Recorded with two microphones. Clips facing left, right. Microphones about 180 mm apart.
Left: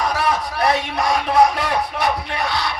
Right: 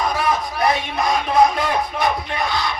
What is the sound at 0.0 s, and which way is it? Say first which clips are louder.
A man's voice: even; 75° left (ahead or behind).